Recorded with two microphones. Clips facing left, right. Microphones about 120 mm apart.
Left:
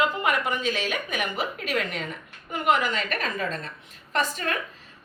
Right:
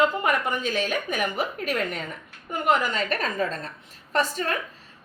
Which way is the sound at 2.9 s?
40° right (ahead or behind).